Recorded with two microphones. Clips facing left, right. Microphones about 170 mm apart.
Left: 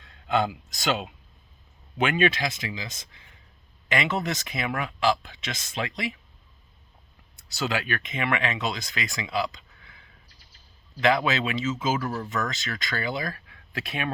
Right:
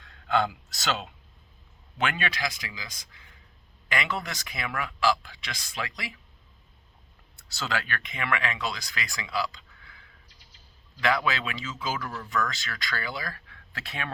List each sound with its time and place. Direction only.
0.0 s a man's voice: 20° left (ahead or behind)
7.3 s speech: 15° left (ahead or behind)
11.0 s speech: 20° left (ahead or behind)